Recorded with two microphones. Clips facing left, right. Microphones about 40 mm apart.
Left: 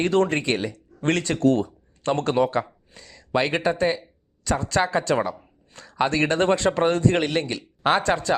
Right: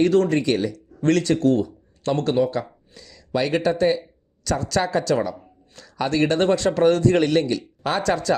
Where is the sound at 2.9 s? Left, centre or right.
Left.